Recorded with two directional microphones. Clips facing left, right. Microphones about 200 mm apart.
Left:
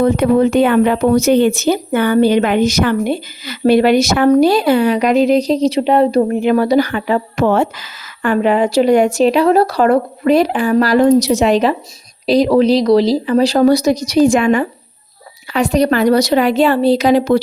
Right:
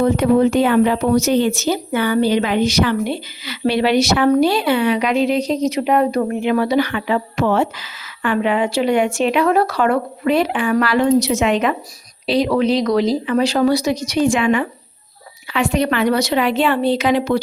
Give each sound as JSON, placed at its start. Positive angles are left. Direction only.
{"t": 0.0, "sound": "speech", "side_deg": 55}